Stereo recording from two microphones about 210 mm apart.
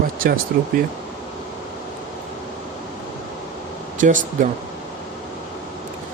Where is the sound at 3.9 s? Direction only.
40° right (ahead or behind).